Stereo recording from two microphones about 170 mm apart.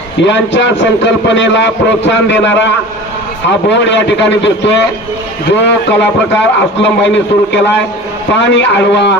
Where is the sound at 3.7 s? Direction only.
90° left.